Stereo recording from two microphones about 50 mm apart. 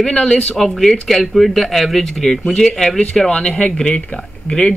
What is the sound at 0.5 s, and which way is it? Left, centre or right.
A man's voice, centre.